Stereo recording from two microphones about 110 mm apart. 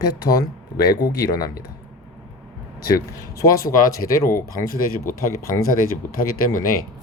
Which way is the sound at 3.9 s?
30° left (ahead or behind).